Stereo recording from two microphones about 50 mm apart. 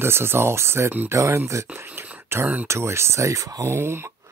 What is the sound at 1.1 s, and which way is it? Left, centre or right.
Speech, right.